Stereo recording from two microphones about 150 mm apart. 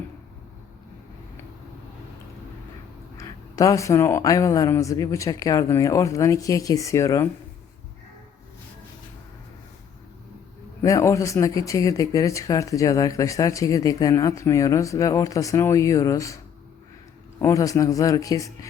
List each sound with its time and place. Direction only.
3.2 s speech: 20° left (ahead or behind)
10.8 s speech: 20° left (ahead or behind)
17.4 s speech: 20° left (ahead or behind)